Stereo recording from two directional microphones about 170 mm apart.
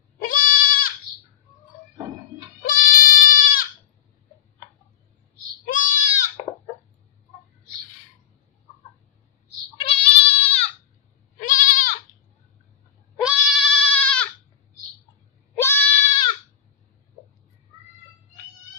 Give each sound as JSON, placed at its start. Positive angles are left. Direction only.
{"t": 0.2, "sound": "goat", "side_deg": 55}
{"t": 2.6, "sound": "goat", "side_deg": 55}
{"t": 5.7, "sound": "goat", "side_deg": 50}
{"t": 9.8, "sound": "goat", "side_deg": 30}
{"t": 11.3, "sound": "goat", "side_deg": 50}
{"t": 13.2, "sound": "goat", "side_deg": 0}
{"t": 15.5, "sound": "goat", "side_deg": 10}